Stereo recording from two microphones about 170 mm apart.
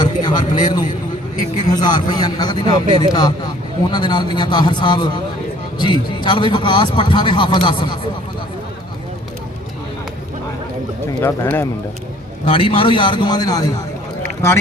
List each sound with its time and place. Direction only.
0.0 s a man's voice: 25° left (ahead or behind)
11.2 s speech: 15° left (ahead or behind)
12.5 s a man's voice: 30° left (ahead or behind)